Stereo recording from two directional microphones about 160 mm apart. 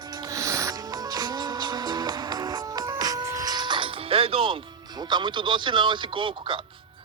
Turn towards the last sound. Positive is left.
turn(degrees=-30)  # may be behind; listen again after turning